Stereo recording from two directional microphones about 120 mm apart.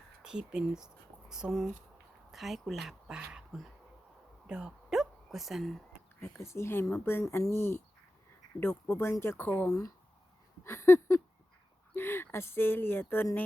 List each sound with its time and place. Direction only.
0.2 s speech: 5° right (ahead or behind)
4.4 s hiccup: 5° right (ahead or behind)
6.1 s speech: 20° left (ahead or behind)
10.6 s a sound: 20° left (ahead or behind)
11.9 s speech: 20° left (ahead or behind)